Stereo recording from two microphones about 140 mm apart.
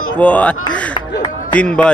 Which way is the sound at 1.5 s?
10° left (ahead or behind).